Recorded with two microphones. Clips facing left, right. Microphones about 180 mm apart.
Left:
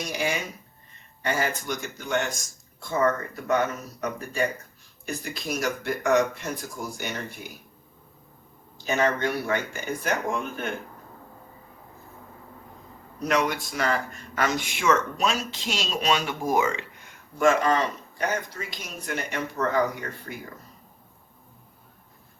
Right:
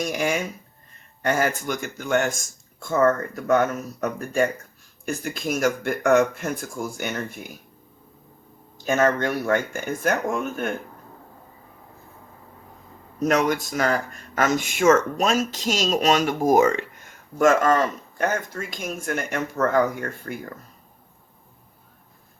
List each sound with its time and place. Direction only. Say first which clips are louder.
0.0 s speech: right 4 dB; 50° right (ahead or behind)
8.8 s speech: right 4 dB; 45° right (ahead or behind)
13.1 s speech: right 4 dB; 45° right (ahead or behind)